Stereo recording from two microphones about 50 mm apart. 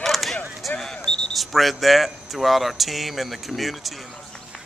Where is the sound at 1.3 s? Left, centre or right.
Centre.